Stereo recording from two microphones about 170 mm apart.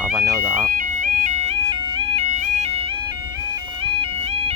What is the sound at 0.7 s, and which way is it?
Music, 50° right (ahead or behind).